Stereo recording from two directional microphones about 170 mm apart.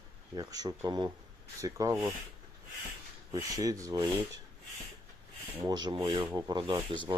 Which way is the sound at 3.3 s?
20° right (ahead or behind).